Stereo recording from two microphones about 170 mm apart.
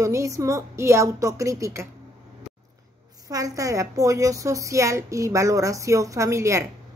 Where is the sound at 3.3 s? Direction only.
20° right (ahead or behind).